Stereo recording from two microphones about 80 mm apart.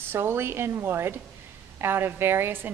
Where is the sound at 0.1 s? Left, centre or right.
Right.